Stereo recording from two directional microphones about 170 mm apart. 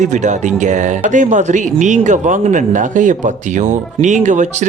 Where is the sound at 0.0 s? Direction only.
45° right (ahead or behind).